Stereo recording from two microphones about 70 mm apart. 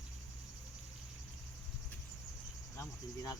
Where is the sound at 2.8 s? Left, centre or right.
Left.